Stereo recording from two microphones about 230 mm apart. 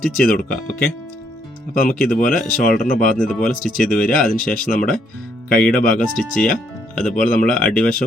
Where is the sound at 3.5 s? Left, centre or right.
Left.